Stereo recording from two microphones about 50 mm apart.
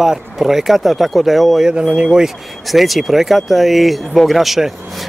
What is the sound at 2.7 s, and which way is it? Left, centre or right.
Speech, centre.